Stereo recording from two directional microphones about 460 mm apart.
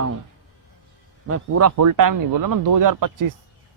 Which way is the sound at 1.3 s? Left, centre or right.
Right.